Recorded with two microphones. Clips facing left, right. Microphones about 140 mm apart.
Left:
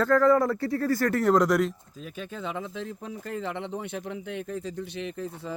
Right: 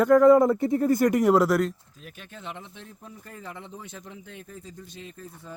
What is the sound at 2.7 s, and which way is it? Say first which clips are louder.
Speech: left 9 dB; 90° left.